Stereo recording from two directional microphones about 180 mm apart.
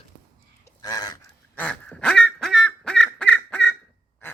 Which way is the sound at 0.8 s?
20° left (ahead or behind).